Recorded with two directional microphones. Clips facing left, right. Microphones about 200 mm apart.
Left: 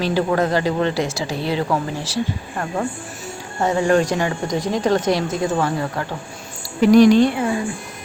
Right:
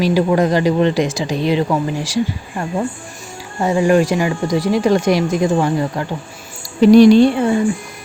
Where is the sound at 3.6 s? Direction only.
10° right (ahead or behind).